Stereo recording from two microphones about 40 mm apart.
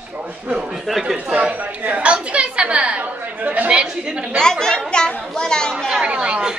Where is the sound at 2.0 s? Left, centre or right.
Right.